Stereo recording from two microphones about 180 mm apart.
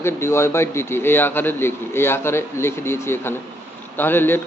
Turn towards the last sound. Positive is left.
turn(degrees=10)  # may be behind; listen again after turning